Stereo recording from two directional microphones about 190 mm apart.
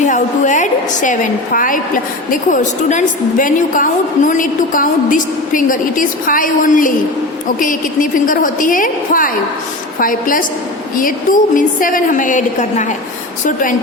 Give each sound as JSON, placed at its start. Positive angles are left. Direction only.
{"t": 0.0, "sound": "a woman's voice", "side_deg": 40}